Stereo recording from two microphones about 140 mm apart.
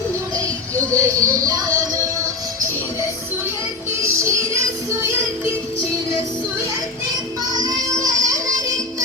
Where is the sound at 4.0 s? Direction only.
20° right (ahead or behind).